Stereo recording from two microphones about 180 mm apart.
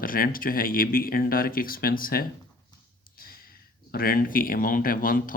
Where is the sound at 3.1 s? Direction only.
55° left (ahead or behind).